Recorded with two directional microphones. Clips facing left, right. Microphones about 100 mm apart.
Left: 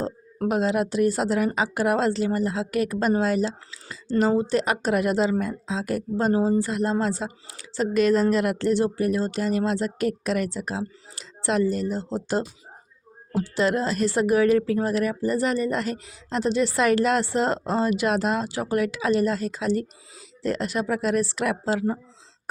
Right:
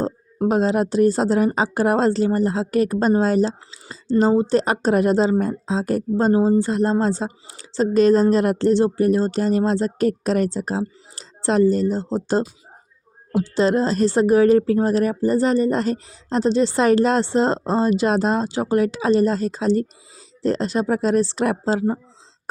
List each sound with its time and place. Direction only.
0.4 s a woman's voice: 35° right (ahead or behind)
13.4 s a woman's voice: 30° right (ahead or behind)